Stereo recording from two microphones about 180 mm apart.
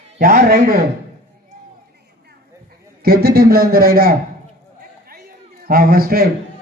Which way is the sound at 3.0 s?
60° right (ahead or behind).